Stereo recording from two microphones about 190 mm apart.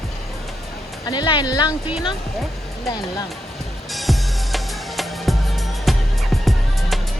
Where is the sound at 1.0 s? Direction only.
20° left (ahead or behind).